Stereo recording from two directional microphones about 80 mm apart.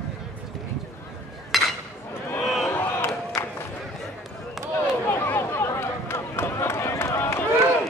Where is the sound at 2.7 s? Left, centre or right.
Left.